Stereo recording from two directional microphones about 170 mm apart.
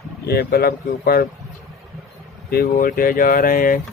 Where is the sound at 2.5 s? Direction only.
60° left (ahead or behind).